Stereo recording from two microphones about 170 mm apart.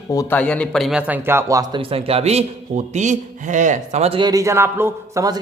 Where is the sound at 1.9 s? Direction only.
35° right (ahead or behind).